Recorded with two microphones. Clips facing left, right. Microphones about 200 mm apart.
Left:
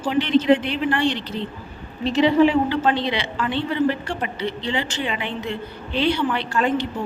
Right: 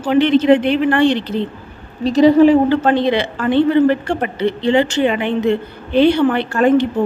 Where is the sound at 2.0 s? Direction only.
40° right (ahead or behind).